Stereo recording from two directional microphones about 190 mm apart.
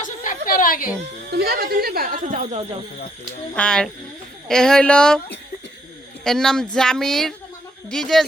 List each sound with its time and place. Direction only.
0.0 s a sound: 45° left (ahead or behind)
1.3 s speech: 55° right (ahead or behind); by 2.6 s 35° right (ahead or behind)
3.5 s speech: 5° left (ahead or behind)
6.2 s speech: 5° left (ahead or behind)